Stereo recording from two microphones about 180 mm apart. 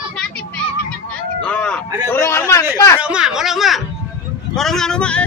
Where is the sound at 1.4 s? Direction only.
5° left (ahead or behind).